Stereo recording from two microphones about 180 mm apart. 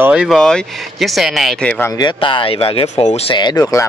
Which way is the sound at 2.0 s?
25° left (ahead or behind).